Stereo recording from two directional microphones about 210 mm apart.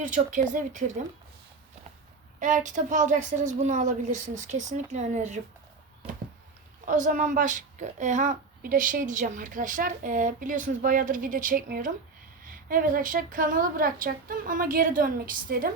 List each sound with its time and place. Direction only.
0.1 s a woman's voice: 35° right (ahead or behind)
2.4 s a woman's voice: 35° right (ahead or behind)
6.0 s a sound: 30° right (ahead or behind)
6.8 s a woman's voice: 40° right (ahead or behind)